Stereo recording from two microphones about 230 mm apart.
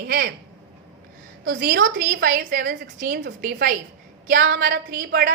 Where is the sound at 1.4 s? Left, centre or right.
Right.